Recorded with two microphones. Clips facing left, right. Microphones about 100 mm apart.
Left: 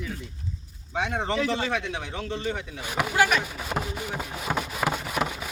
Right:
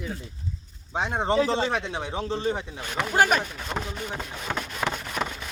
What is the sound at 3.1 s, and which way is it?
Speech, 45° right (ahead or behind).